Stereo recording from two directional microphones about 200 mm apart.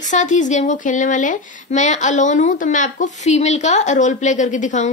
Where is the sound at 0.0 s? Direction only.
35° left (ahead or behind).